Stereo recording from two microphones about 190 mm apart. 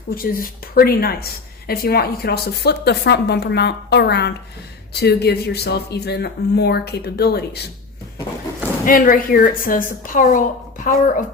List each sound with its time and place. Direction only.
0.1 s a woman's voice: 50° left (ahead or behind)
8.9 s a woman's voice: 45° left (ahead or behind)